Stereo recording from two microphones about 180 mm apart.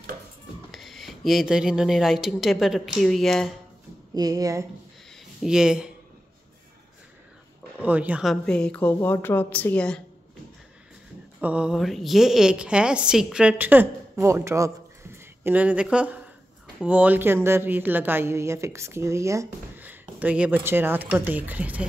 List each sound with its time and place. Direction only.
0.7 s speech: centre (ahead or behind)
4.1 s speech: 20° right (ahead or behind)
5.4 s a woman's voice: 5° right (ahead or behind)
7.8 s a woman's voice: 10° right (ahead or behind)
11.4 s a woman's voice: 5° right (ahead or behind)